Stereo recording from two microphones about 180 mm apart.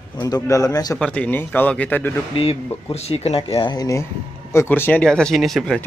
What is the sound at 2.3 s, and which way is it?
Speech, 30° left (ahead or behind).